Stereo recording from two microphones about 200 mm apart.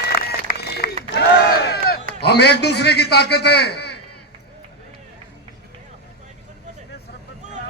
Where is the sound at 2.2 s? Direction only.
55° left (ahead or behind).